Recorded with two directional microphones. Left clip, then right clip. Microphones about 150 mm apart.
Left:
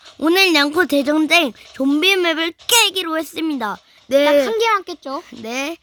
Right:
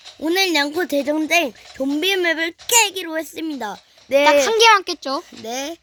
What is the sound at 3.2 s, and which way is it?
Speech, 60° left (ahead or behind).